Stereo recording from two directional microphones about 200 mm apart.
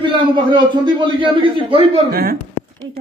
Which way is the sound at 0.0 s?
25° right (ahead or behind).